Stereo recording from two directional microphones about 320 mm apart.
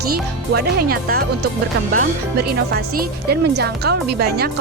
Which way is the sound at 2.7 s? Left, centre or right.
Right.